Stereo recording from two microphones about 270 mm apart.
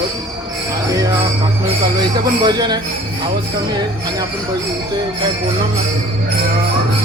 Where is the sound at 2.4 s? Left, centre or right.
Centre.